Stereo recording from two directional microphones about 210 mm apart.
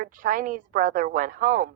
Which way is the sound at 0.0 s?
40° right (ahead or behind).